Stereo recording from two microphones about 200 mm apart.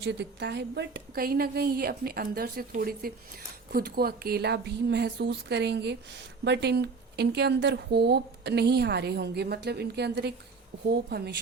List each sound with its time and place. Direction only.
0.0 s a woman's voice: 60° right (ahead or behind)